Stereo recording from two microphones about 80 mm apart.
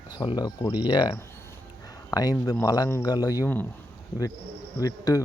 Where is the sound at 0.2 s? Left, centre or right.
Left.